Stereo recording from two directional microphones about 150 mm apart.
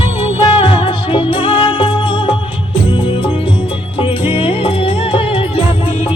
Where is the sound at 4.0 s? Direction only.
35° left (ahead or behind).